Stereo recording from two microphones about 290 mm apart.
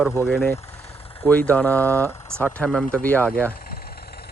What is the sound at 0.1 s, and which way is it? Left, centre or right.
Speech, centre.